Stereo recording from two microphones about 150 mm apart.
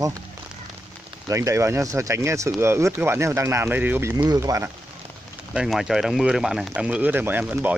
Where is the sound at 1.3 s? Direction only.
20° right (ahead or behind).